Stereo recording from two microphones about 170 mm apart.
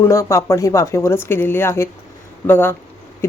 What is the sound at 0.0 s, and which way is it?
Speech, 15° left (ahead or behind).